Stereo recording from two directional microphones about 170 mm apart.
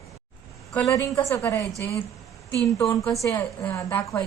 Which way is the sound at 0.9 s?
20° left (ahead or behind).